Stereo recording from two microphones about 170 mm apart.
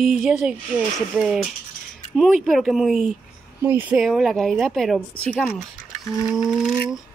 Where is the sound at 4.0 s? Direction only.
Centre (ahead or behind).